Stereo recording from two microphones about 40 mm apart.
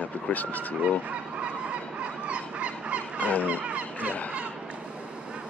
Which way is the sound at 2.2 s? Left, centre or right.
Right.